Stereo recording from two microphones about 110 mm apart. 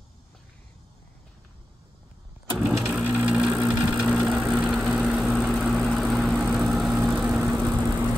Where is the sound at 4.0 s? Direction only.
5° right (ahead or behind).